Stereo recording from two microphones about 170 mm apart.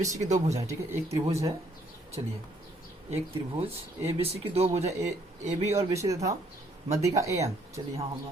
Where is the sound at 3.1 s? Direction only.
35° right (ahead or behind).